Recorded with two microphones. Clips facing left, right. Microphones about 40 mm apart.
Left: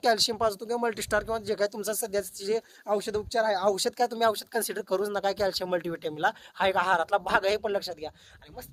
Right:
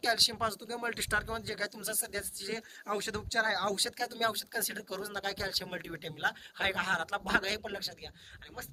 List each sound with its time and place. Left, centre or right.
0.0 s speech: centre
0.4 s speech: right
1.5 s speech: centre
2.6 s speech: right
3.9 s speech: centre